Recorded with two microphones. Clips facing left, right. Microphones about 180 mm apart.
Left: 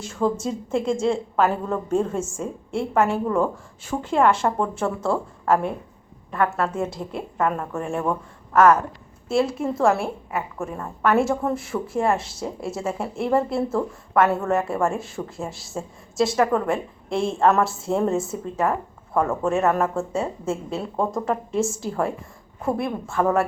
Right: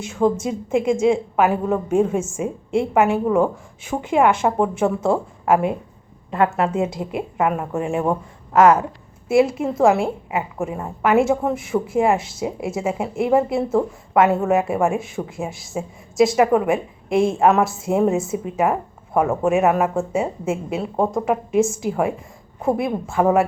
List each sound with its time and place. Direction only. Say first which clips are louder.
0.4 s a woman's voice: right 4 dB; 15° right (ahead or behind)